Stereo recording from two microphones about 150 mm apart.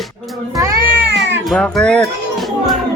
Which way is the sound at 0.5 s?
20° right (ahead or behind).